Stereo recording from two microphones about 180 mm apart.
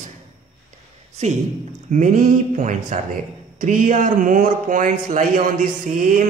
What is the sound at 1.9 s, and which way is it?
A man's voice, 45° right (ahead or behind).